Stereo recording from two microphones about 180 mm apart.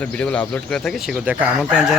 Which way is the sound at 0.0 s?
5° left (ahead or behind).